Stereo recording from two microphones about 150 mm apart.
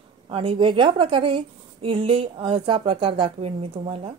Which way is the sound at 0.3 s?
35° right (ahead or behind).